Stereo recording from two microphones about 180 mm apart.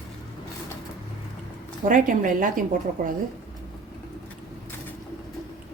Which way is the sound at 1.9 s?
50° right (ahead or behind).